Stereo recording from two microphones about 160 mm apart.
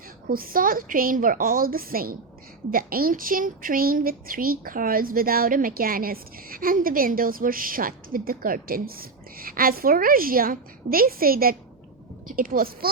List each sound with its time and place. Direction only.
0.3 s speech: 65° right (ahead or behind)